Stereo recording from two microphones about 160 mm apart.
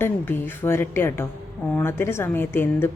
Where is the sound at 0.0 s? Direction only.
15° left (ahead or behind).